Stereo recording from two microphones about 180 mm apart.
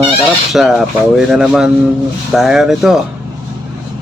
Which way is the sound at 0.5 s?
Centre (ahead or behind).